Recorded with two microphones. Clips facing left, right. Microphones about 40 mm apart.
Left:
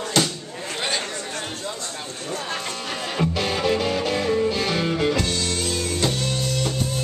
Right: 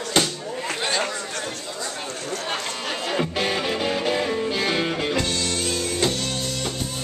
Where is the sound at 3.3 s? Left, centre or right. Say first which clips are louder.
Left 2 dB; right; by 6.7 s centre.